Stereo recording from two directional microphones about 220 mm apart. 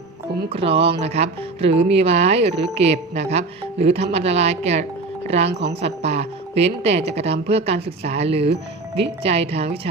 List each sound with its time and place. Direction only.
0.5 s speech: 25° right (ahead or behind)